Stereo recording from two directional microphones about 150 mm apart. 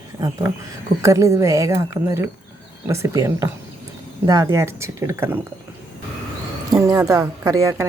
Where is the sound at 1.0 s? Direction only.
20° right (ahead or behind).